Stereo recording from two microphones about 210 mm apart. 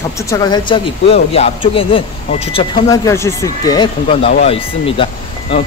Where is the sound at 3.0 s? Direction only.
15° left (ahead or behind).